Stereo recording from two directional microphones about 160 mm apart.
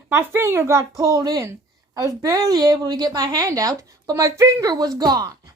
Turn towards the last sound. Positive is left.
turn(degrees=-25)  # may be behind; listen again after turning